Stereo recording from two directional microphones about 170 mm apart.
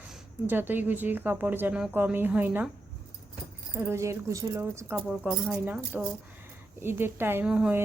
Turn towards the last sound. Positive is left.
turn(degrees=-5)  # may be behind; listen again after turning